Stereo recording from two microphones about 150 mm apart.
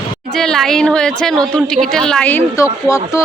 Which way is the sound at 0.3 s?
5° left (ahead or behind).